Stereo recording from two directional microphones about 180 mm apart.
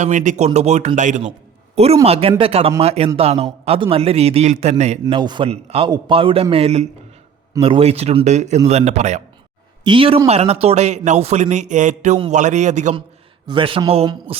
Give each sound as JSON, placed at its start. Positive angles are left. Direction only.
{"t": 0.0, "sound": "a man's voice", "side_deg": -45}
{"t": 9.8, "sound": "a man's voice", "side_deg": -30}
{"t": 13.5, "sound": "a man's voice", "side_deg": -30}